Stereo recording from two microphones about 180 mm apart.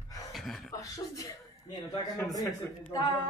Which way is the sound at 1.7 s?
20° left (ahead or behind).